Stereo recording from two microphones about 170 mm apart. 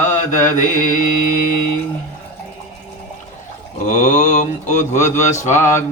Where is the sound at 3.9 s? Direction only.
45° left (ahead or behind).